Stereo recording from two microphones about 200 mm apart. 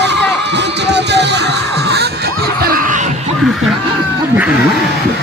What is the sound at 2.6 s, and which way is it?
Music, 45° right (ahead or behind).